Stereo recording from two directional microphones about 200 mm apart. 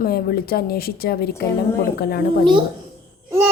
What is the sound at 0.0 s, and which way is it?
Speech, 50° left (ahead or behind).